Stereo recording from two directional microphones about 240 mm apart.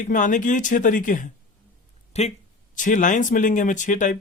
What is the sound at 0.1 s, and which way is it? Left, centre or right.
Speech, left.